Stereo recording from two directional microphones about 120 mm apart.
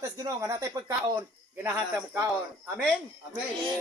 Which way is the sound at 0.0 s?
25° right (ahead or behind).